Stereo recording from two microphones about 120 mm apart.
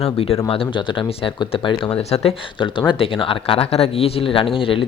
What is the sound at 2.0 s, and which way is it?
Speech, 60° left (ahead or behind).